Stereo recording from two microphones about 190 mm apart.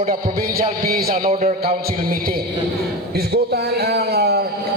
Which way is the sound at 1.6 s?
50° right (ahead or behind).